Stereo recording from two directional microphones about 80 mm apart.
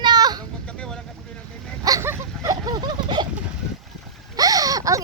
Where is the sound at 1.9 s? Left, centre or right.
Right.